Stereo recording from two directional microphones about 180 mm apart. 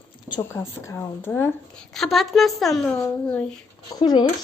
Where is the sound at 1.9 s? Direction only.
Centre (ahead or behind).